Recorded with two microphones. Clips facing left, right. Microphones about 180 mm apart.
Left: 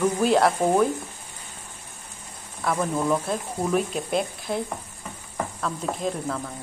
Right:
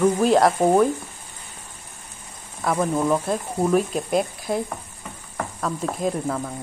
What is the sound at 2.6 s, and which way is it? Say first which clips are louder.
Speech: right 3 dB; 10° right (ahead or behind).